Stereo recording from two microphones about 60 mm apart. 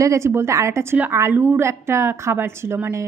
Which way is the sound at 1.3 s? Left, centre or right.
Right.